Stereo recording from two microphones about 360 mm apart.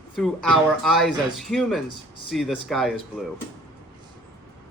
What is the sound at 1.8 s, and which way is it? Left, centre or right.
Speech, left.